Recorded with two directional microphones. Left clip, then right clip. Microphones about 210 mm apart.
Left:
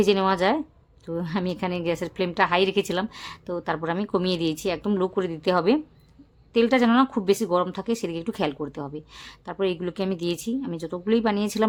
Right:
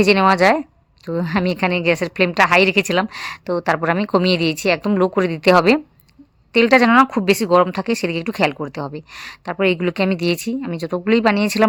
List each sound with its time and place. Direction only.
0.0 s a woman's voice: 25° right (ahead or behind)